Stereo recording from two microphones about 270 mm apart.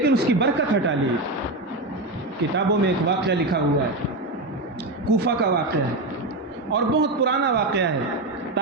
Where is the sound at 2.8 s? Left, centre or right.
Right.